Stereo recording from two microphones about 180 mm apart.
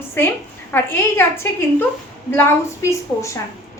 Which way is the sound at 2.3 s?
15° left (ahead or behind).